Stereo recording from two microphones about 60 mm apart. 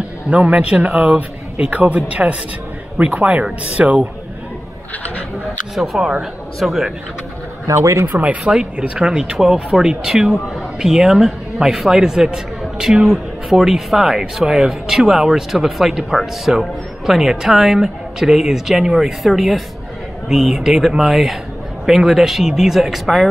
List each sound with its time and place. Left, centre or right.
0.3 s speech: right
5.9 s a man's voice: centre
7.6 s speech: right
8.1 s a man's voice: right; by 23.3 s centre